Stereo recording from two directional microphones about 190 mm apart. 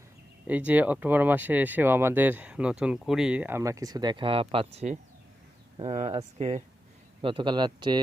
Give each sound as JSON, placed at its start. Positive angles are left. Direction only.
{"t": 0.4, "sound": "a man's voice", "side_deg": -10}